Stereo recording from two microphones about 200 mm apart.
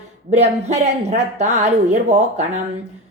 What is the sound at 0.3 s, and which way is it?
A woman's voice, 35° right (ahead or behind).